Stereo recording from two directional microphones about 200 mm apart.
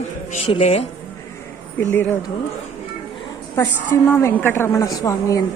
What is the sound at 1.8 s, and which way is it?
Speech, 10° left (ahead or behind).